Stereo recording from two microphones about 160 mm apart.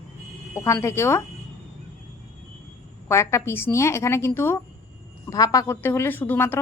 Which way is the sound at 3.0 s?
15° left (ahead or behind).